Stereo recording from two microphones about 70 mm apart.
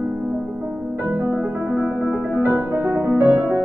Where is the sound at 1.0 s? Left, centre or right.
Right.